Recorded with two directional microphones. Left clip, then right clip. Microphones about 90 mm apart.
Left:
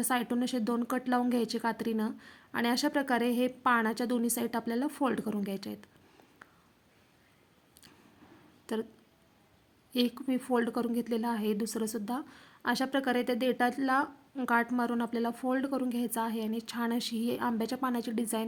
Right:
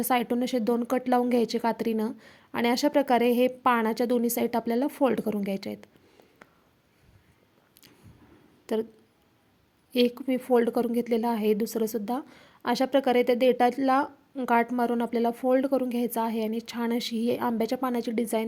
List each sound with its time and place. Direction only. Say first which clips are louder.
0.0 s a woman's voice: right 6 dB; 45° right (ahead or behind)
8.6 s speech: right 7 dB; 40° right (ahead or behind)
9.9 s a woman's voice: right 7 dB; 45° right (ahead or behind)